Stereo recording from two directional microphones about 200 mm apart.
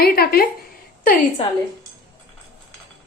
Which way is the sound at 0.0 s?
50° left (ahead or behind).